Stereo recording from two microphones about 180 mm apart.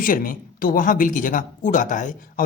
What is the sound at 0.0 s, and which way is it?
Speech, 50° left (ahead or behind).